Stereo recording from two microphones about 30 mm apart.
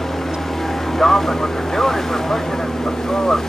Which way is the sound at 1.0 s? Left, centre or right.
Centre.